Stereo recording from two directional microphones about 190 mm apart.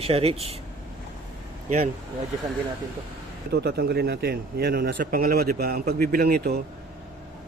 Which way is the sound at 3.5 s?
55° right (ahead or behind).